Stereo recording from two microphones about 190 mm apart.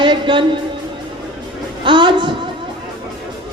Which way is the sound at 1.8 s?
25° right (ahead or behind).